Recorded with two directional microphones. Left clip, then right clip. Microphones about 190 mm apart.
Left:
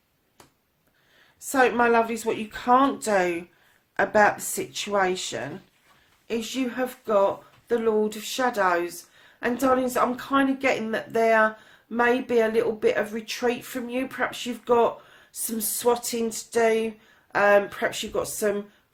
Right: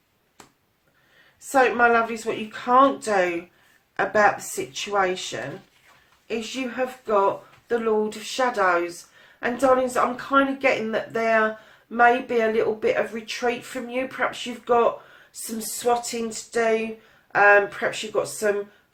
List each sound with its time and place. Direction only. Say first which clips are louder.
1.5 s speech: right 2 dB; 40° left (ahead or behind)
8.4 s speech: right 2 dB; 40° left (ahead or behind)